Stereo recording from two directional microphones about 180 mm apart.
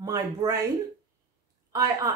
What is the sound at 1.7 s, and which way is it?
Speech, 20° right (ahead or behind).